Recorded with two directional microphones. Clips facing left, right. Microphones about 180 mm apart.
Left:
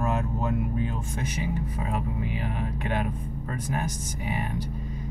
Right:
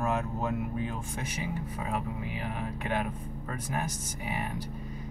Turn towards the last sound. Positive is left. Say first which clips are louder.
# left 4 dB
turn(degrees=-5)  # may be behind; listen again after turning